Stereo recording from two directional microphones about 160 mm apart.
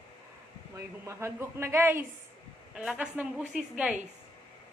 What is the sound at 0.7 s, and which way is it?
A woman's voice, 15° right (ahead or behind).